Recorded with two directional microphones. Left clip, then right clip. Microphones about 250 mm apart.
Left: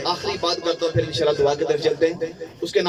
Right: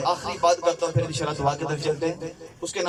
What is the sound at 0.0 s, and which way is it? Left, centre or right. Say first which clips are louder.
Music: right 1 dB; left.